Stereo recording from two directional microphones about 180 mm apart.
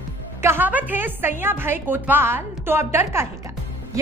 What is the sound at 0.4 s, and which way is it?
A woman's voice, 10° right (ahead or behind).